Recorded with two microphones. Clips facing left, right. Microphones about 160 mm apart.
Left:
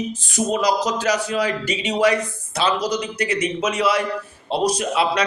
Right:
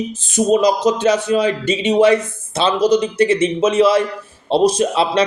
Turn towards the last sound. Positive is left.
turn(degrees=-25)  # may be behind; listen again after turning